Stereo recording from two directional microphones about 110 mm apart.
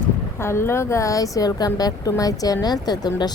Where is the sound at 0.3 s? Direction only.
25° left (ahead or behind).